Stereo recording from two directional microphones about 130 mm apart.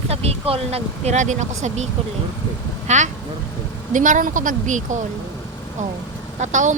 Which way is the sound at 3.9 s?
80° right.